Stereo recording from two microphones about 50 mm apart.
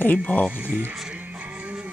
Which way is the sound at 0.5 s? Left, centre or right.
Right.